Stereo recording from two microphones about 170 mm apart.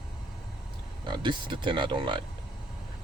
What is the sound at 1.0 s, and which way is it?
Speech, 25° right (ahead or behind).